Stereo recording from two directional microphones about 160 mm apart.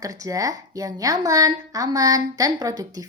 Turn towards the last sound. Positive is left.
turn(degrees=-20)  # may be behind; listen again after turning